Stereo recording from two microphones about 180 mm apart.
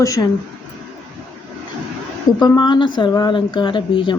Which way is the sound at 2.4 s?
25° left (ahead or behind).